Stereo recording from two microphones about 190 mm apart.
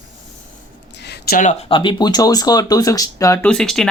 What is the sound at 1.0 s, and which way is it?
Speech, 60° left (ahead or behind).